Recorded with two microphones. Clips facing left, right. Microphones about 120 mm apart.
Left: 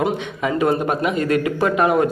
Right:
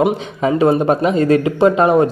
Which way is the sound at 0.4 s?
30° right (ahead or behind).